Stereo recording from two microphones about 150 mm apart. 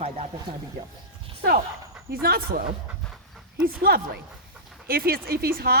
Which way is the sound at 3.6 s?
80° right.